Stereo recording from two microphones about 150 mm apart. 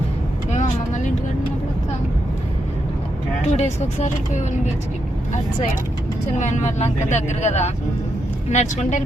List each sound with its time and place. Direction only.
0.5 s vehicle: 50° left (ahead or behind)
3.4 s speech: 45° left (ahead or behind)
6.4 s speech: 55° left (ahead or behind)